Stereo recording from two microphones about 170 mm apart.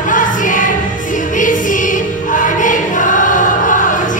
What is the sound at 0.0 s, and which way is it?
Music, 50° left (ahead or behind).